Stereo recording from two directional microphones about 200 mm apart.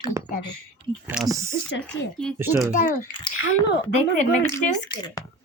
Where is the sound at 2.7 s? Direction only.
40° left (ahead or behind).